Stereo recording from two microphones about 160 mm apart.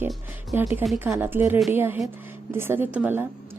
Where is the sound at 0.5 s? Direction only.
15° right (ahead or behind).